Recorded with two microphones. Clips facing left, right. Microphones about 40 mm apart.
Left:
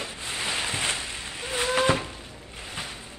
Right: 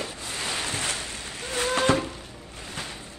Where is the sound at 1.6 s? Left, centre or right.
Centre.